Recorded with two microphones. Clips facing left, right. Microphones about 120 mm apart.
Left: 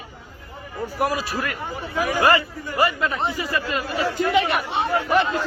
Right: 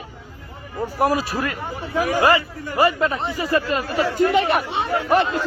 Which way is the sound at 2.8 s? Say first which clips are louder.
Right 3 dB; 30° right (ahead or behind).